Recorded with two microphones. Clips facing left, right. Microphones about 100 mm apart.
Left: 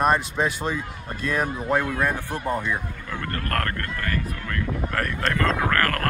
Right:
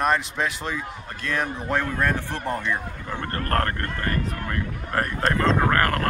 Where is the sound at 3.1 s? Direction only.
30° right (ahead or behind).